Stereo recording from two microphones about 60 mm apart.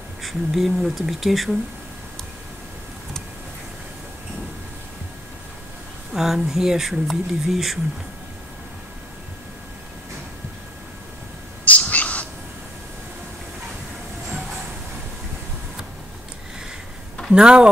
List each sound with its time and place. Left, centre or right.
0.2 s speech: centre
6.1 s speech: centre
11.6 s a sound: left
17.3 s speech: centre